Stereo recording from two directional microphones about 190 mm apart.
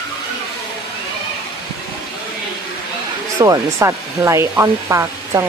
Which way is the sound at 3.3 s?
15° right (ahead or behind).